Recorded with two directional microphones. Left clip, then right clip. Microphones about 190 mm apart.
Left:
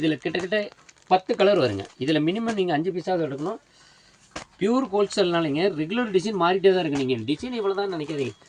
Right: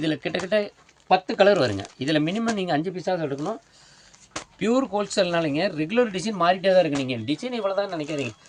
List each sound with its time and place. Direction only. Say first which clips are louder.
0.0 s speech: left 1 dB; 55° right (ahead or behind)
4.6 s speech: left 1 dB; 65° right (ahead or behind)